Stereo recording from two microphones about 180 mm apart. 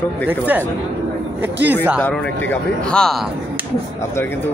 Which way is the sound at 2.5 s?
5° left (ahead or behind).